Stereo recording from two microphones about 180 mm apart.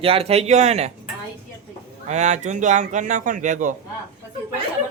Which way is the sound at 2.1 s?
40° right (ahead or behind).